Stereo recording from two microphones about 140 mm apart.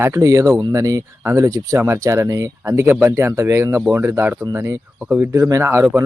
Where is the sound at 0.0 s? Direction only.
25° right (ahead or behind).